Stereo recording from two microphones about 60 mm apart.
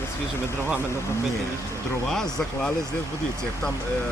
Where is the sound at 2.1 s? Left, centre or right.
Centre.